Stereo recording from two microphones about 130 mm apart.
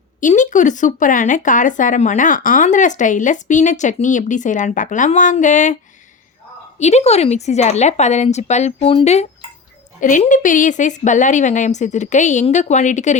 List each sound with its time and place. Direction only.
0.2 s speech: 75° left (ahead or behind)
6.7 s speech: 60° left (ahead or behind)
10.0 s speech: 80° left; by 13.1 s 65° left (ahead or behind)